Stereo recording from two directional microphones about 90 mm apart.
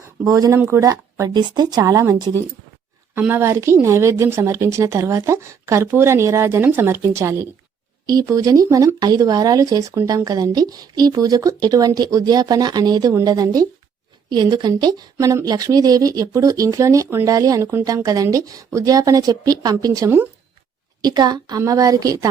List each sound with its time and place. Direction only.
0.3 s speech: 40° right (ahead or behind)
1.3 s speech: 60° right (ahead or behind)
3.2 s speech: 25° right (ahead or behind); by 15.0 s 50° right (ahead or behind)
15.2 s speech: 35° right (ahead or behind)
17.8 s speech: 40° right (ahead or behind)
21.0 s speech: 50° right (ahead or behind)